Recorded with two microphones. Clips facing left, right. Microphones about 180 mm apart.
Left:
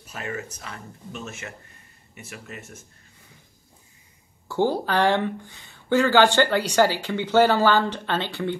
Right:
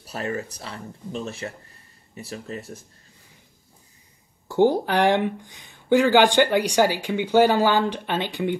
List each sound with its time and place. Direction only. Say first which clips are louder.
0.0 s speech: right 4 dB; 35° right (ahead or behind)
4.5 s speech: right 4 dB; 15° right (ahead or behind)